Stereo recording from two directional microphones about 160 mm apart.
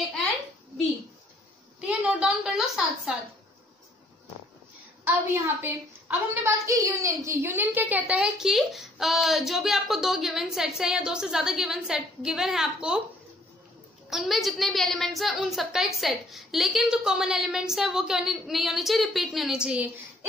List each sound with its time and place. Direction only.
1.8 s a sound: 5° right (ahead or behind)
5.0 s a woman's voice: 10° right (ahead or behind)
14.1 s a woman's voice: centre (ahead or behind)